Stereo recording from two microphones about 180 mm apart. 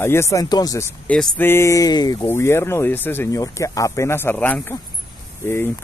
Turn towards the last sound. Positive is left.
turn(degrees=15)  # may be behind; listen again after turning